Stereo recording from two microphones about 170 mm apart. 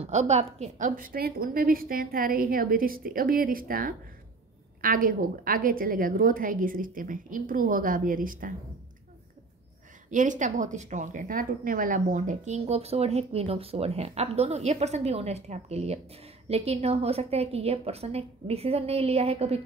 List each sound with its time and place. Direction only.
0.0 s a woman's voice: 40° right (ahead or behind)
10.1 s a woman's voice: 50° right (ahead or behind)